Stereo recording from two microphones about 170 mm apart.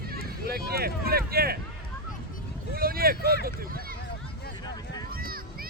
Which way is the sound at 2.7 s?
60° right (ahead or behind).